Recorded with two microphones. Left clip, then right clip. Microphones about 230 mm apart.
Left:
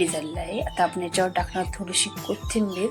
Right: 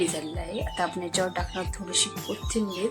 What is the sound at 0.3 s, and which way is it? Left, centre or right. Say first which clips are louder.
Speech: left 5 dB; centre.